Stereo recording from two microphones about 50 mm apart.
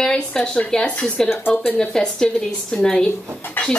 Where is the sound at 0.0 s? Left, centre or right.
Centre.